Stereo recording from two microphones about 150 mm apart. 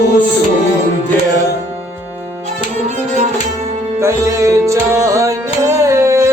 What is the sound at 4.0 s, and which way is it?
Music, 20° right (ahead or behind).